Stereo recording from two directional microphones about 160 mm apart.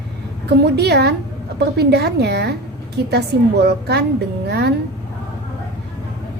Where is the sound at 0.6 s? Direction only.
90° right.